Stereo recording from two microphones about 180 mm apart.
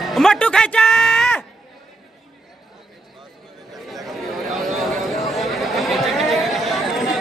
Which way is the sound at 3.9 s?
Centre (ahead or behind).